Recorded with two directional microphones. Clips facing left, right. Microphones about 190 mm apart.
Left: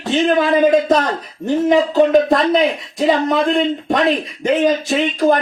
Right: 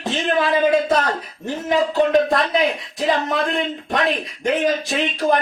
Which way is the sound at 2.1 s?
Centre (ahead or behind).